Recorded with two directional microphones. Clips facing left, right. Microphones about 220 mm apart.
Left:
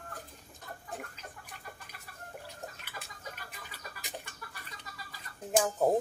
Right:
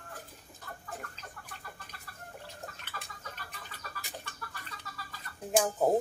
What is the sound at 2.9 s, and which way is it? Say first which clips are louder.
Chicken: even; 15° left (ahead or behind).